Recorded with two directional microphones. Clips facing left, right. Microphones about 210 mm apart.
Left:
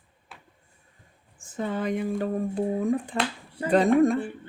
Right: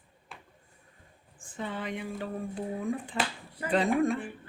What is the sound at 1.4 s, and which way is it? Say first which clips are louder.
Speech: left 7 dB; 45° left (ahead or behind).